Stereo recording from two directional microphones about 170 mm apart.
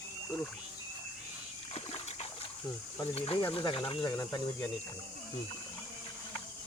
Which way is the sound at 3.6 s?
30° left (ahead or behind).